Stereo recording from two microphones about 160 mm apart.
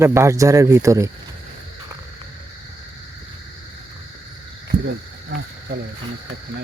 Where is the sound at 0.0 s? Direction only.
15° right (ahead or behind).